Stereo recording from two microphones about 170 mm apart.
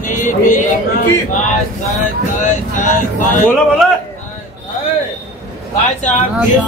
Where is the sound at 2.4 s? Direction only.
45° left (ahead or behind).